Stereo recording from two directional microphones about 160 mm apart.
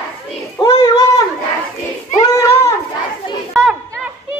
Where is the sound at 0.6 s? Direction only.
20° left (ahead or behind).